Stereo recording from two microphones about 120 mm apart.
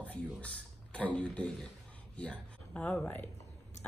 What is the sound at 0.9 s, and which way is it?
A man's voice, 10° left (ahead or behind).